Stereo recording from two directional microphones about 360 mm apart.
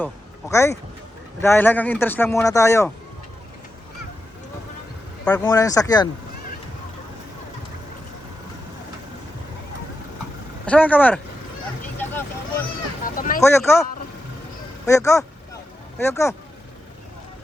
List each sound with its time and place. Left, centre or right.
0.0 s speech: centre
5.2 s speech: centre
10.7 s speech: centre
11.9 s vehicle: centre
13.1 s speech: left
13.4 s speech: centre
14.8 s speech: centre